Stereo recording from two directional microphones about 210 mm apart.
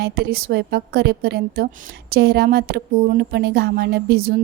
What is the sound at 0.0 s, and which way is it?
Speech, 45° right (ahead or behind).